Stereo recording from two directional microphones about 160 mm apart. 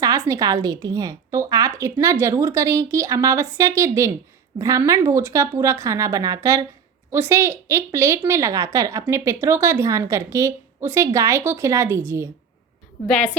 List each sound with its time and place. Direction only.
0.0 s a woman's voice: 25° right (ahead or behind)